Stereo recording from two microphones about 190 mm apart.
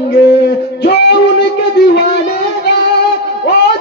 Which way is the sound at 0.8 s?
60° left (ahead or behind).